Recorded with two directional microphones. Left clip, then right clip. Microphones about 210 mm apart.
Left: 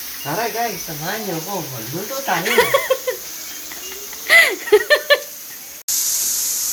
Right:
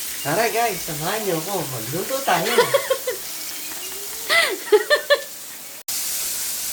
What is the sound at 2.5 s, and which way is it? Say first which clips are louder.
Speech: left 5 dB; 10° left (ahead or behind).